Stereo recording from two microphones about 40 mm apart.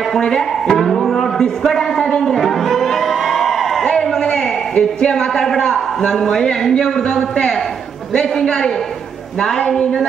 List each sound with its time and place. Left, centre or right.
0.2 s a man's voice: centre
0.8 s music: centre
1.6 s a man's voice: centre
2.0 s a sound: left
2.2 s music: centre
3.8 s a sound: centre
5.1 s a man's voice: centre
8.1 s a man's voice: centre